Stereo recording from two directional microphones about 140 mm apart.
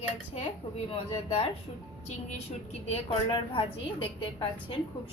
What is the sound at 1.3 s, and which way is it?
Speech, 45° left (ahead or behind).